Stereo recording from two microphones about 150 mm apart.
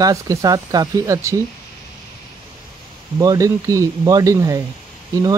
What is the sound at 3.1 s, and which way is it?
Speech, 20° right (ahead or behind).